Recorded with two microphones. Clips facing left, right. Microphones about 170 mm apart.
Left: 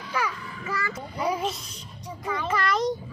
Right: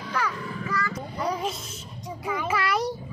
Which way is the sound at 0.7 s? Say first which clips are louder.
Even; 25° left (ahead or behind).